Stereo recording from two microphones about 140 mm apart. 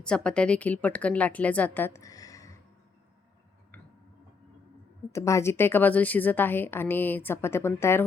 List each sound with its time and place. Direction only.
0.0 s a woman's voice: 5° left (ahead or behind); by 2.6 s 25° left (ahead or behind)
5.1 s a woman's voice: 20° left (ahead or behind)